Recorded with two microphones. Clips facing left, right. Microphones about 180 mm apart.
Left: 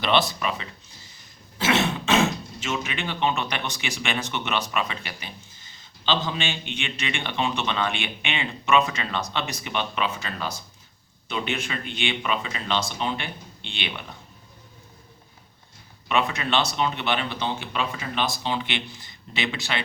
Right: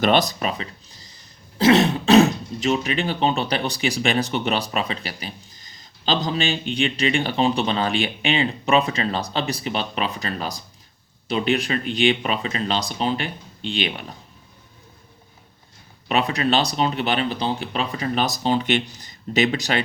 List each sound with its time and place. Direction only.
0.0 s speech: 40° right (ahead or behind)
16.0 s speech: 35° right (ahead or behind)